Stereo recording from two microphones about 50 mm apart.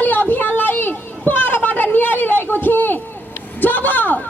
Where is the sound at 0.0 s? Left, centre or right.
Left.